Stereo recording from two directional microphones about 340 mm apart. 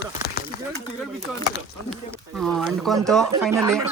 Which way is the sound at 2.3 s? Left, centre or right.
Centre.